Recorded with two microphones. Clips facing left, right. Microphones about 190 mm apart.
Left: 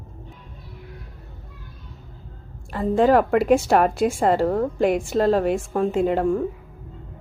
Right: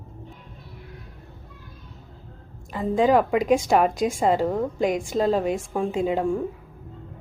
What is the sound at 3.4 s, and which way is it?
Speech, 5° left (ahead or behind).